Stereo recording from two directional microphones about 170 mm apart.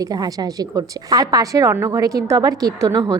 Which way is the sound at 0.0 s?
20° right (ahead or behind).